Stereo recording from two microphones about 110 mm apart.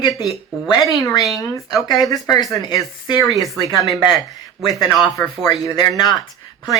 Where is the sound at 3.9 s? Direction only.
Centre (ahead or behind).